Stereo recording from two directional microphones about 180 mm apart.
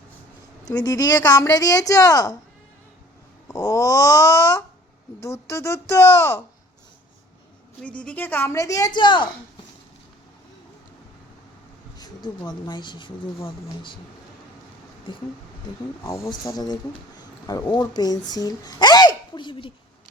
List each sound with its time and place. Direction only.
0.8 s a woman's voice: 20° left (ahead or behind)
3.5 s a woman's voice: 15° left (ahead or behind)
7.8 s a woman's voice: 5° left (ahead or behind); by 9.3 s 25° left (ahead or behind)
11.9 s a sound: 20° left (ahead or behind)
12.5 s a woman's voice: 25° left (ahead or behind)
15.1 s a woman's voice: 25° left (ahead or behind)